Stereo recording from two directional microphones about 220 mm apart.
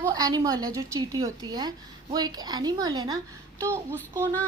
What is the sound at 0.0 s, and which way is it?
A woman's voice, 15° right (ahead or behind).